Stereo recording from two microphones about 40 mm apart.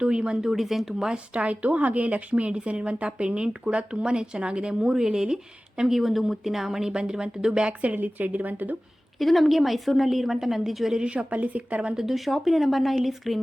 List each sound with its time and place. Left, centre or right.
0.0 s speech: right
0.4 s speech: centre
1.1 s speech: right
5.9 s speech: centre; by 7.7 s right
7.9 s speech: right
9.1 s a woman's voice: centre
10.9 s a woman's voice: right
11.9 s a woman's voice: centre